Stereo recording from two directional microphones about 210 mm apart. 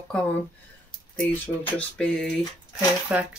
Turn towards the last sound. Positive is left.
turn(degrees=-5)  # may be behind; listen again after turning